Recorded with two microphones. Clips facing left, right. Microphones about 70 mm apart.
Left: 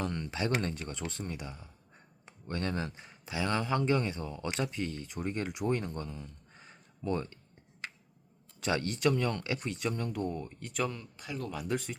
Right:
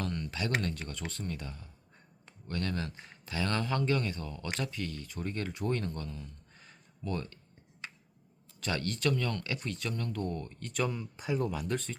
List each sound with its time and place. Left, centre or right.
0.0 s speech: left
8.6 s speech: centre
10.9 s speech: centre
11.5 s speech: centre